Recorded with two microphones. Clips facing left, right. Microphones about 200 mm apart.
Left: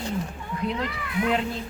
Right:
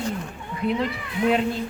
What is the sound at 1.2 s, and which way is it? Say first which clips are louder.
Speech: right 5 dB; 5° right (ahead or behind).